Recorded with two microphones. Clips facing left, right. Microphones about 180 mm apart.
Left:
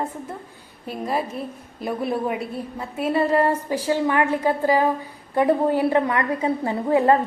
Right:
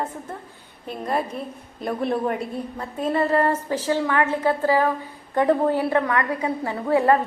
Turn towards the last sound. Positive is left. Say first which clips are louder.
# left 1 dB
turn(degrees=20)  # may be behind; listen again after turning